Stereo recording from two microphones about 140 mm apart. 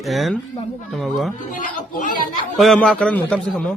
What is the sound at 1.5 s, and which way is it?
Chatter, 75° left (ahead or behind).